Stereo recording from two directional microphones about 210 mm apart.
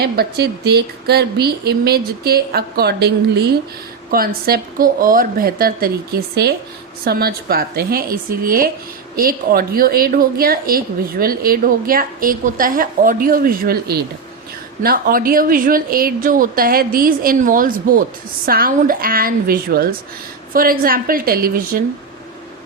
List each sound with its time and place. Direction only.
0.0 s a woman's voice: 50° right (ahead or behind)